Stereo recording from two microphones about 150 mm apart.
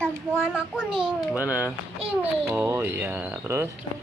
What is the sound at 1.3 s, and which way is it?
Speech, 10° right (ahead or behind).